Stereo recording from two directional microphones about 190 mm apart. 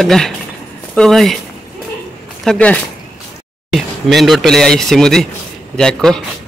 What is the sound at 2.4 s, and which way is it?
Speech, 5° left (ahead or behind).